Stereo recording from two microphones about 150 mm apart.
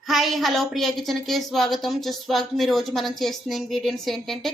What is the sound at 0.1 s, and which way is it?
A woman's voice, centre (ahead or behind).